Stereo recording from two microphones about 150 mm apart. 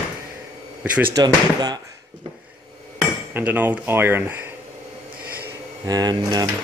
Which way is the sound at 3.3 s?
10° right (ahead or behind).